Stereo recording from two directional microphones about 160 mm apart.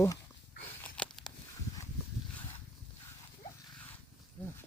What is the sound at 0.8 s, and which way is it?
Biting, 5° left (ahead or behind).